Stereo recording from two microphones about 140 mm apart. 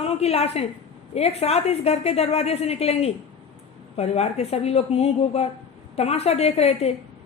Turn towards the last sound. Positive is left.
turn(degrees=50)  # may be behind; listen again after turning